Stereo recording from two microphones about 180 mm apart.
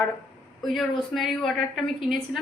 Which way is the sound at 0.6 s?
Centre (ahead or behind).